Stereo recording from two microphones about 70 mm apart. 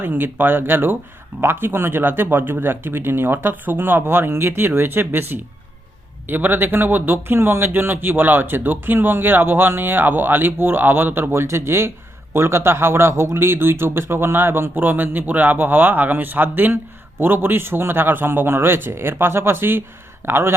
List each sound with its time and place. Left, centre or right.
0.0 s a man's voice: right